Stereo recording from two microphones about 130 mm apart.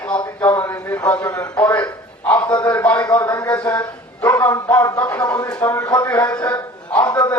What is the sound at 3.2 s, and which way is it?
Speech, 25° left (ahead or behind).